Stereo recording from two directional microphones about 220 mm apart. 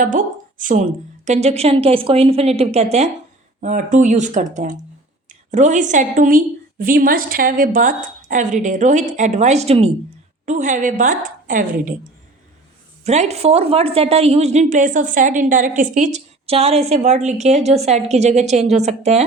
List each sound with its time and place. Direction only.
0.6 s a woman's voice: 35° right (ahead or behind)
13.1 s a woman's voice: 30° right (ahead or behind)